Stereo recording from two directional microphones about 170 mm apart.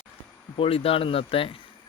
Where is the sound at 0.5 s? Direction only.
35° left (ahead or behind).